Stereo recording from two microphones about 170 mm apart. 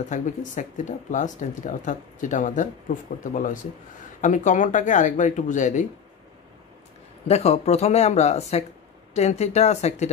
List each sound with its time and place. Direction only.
0.1 s speech: 45° left (ahead or behind)
7.2 s speech: 40° left (ahead or behind)